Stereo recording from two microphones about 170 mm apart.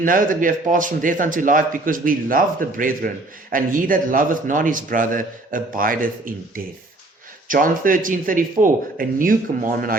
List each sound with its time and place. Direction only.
0.0 s a man's voice: 55° right (ahead or behind)
7.4 s a man's voice: 55° right (ahead or behind)